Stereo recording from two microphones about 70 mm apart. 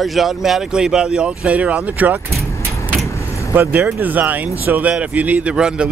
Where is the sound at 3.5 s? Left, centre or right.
Right.